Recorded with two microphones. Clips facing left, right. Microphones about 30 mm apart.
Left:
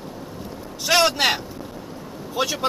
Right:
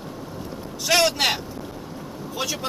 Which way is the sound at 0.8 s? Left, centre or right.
Centre.